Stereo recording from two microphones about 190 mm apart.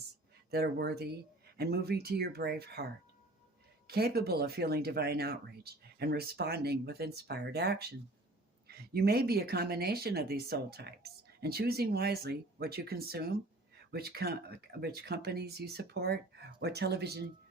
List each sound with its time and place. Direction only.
0.5 s speech: 55° right (ahead or behind)